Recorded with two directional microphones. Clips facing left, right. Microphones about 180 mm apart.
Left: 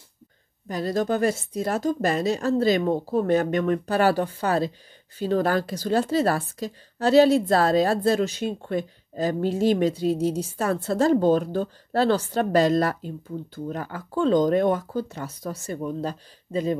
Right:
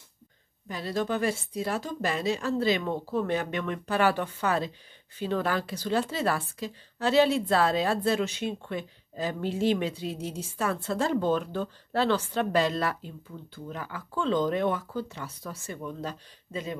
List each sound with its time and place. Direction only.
0.7 s a woman's voice: 40° left (ahead or behind)